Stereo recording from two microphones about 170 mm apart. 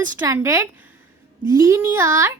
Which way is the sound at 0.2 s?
20° right (ahead or behind).